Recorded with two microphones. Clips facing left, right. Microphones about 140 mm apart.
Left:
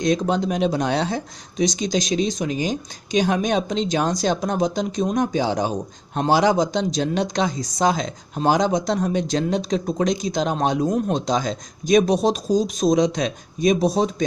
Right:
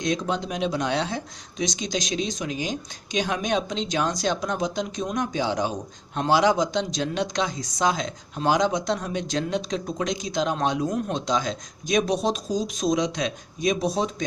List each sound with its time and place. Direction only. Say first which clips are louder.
0.0 s speech: left 6 dB; 45° left (ahead or behind)